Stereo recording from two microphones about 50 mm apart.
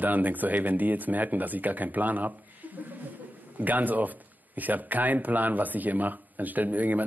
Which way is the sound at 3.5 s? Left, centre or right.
Right.